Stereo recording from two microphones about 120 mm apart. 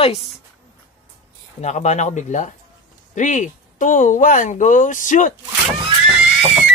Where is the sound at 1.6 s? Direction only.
70° left (ahead or behind); by 5.3 s 90° left.